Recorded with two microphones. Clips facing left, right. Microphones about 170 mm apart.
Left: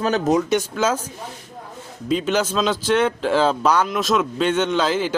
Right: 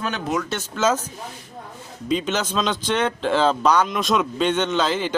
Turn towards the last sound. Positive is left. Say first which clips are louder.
# left 2 dB
turn(degrees=5)  # may be behind; listen again after turning